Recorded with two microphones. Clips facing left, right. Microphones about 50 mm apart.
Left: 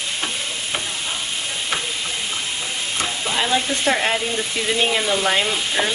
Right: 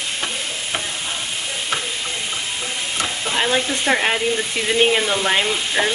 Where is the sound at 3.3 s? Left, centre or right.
Centre.